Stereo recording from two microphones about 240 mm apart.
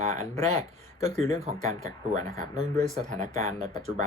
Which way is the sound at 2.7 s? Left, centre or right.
Right.